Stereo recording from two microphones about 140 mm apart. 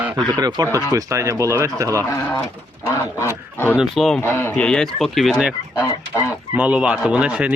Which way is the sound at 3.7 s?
Centre (ahead or behind).